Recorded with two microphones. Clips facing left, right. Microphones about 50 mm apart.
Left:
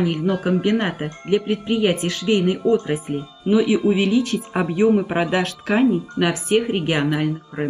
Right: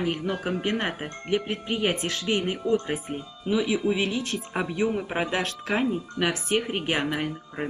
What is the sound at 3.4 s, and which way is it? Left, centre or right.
Speech, left.